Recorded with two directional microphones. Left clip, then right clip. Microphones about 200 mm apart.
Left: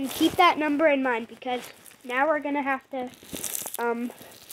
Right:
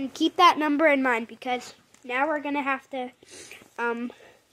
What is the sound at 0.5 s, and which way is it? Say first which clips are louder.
Speech: right 1 dB; 35° right (ahead or behind).